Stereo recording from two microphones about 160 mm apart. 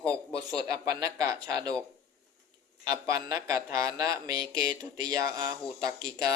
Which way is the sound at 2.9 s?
20° right (ahead or behind).